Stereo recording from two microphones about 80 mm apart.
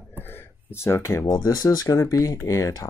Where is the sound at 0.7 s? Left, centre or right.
Left.